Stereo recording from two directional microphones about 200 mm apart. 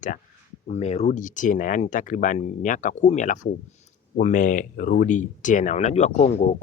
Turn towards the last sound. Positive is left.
turn(degrees=35)  # may be behind; listen again after turning